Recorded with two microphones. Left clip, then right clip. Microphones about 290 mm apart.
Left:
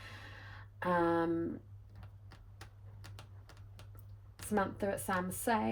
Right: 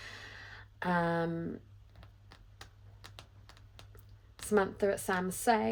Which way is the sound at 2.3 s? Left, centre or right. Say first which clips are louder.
Right 3 dB; centre.